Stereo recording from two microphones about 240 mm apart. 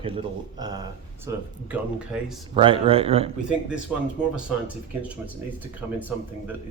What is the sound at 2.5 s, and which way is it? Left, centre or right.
Speech, right.